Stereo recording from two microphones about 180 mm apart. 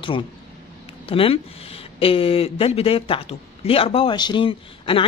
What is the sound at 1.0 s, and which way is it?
Speech, 30° left (ahead or behind).